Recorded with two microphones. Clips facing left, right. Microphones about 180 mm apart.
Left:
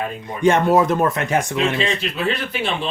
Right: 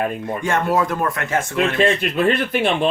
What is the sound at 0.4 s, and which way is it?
Speech, 20° left (ahead or behind).